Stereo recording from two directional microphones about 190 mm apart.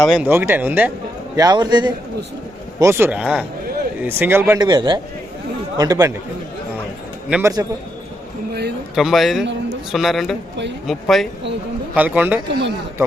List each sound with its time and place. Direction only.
0.1 s speech: 10° right (ahead or behind)
1.4 s a man's voice: 20° right (ahead or behind)
7.3 s a man's voice: 5° right (ahead or behind)
9.0 s a man's voice: centre (ahead or behind)
12.5 s speech: 65° right (ahead or behind)